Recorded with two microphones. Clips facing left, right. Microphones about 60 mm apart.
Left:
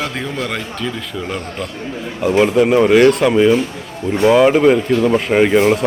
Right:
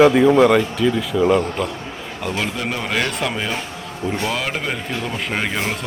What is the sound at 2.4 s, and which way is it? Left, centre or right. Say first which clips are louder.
Speech: left 13 dB; centre.